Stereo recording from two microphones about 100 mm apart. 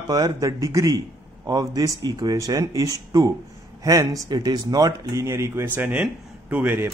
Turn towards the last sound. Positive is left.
turn(degrees=-20)  # may be behind; listen again after turning